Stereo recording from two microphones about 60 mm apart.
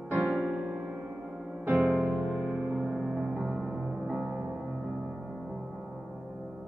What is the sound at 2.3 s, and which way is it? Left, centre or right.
Music, centre.